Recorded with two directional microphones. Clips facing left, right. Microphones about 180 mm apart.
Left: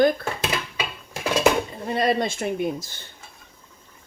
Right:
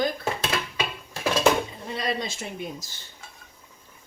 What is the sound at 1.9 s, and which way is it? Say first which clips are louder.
Speech: left 10 dB; 55° left (ahead or behind).